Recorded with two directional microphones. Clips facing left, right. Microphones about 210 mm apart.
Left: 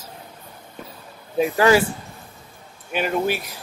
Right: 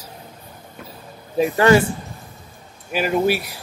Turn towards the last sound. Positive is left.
turn(degrees=-10)  # may be behind; listen again after turning